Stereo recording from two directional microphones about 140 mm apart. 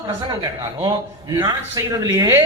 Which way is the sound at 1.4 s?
25° right (ahead or behind).